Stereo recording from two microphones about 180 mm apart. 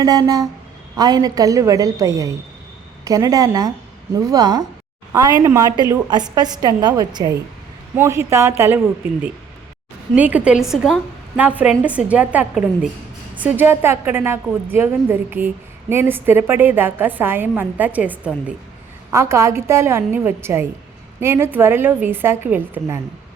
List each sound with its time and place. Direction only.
0.0 s a woman's voice: 20° right (ahead or behind)
10.2 s a woman's voice: 10° right (ahead or behind)